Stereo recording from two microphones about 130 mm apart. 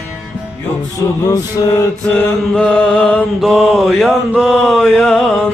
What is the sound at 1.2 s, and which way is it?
Music, 30° left (ahead or behind).